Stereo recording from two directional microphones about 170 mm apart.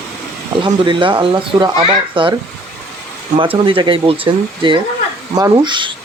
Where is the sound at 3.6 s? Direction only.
30° right (ahead or behind).